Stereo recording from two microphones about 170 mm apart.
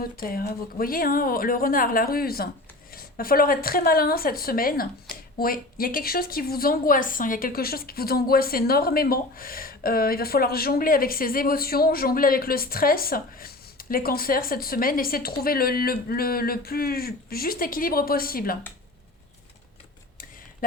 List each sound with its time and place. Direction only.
0.0 s speech: 60° left (ahead or behind)